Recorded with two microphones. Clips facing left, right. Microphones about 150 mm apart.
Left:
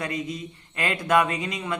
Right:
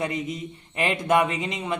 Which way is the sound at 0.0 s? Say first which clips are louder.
Right 2 dB; 25° right (ahead or behind).